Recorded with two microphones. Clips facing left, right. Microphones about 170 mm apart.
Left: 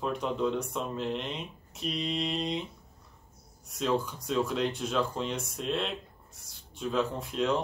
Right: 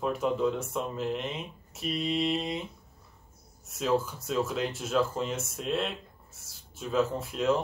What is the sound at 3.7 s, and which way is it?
Speech, 5° right (ahead or behind).